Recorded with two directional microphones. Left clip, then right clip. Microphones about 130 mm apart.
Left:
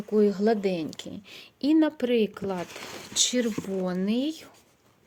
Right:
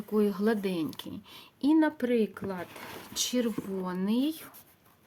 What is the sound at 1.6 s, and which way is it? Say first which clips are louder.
A woman's voice: left 2 dB; 35° left (ahead or behind).